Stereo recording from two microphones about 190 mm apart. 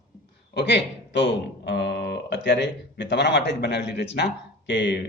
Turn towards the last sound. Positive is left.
turn(degrees=70)  # may be behind; listen again after turning